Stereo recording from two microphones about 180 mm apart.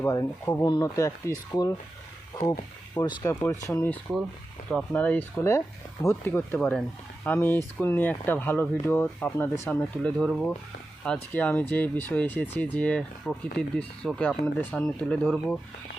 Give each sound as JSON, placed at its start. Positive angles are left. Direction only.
{"t": 0.0, "sound": "speech", "side_deg": 15}